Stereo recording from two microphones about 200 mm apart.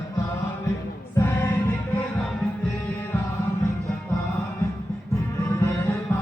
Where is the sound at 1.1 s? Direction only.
10° left (ahead or behind).